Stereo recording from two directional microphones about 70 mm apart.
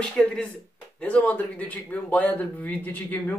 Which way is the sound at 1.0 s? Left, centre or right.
Left.